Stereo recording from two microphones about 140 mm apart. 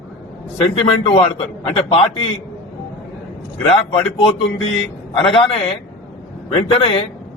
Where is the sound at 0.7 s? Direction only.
40° left (ahead or behind).